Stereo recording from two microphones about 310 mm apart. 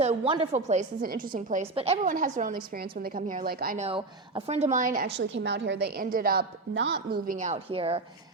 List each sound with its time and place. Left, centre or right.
0.0 s a woman's voice: centre